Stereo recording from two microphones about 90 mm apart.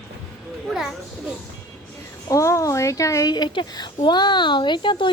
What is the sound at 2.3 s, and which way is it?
A woman's voice, 35° left (ahead or behind).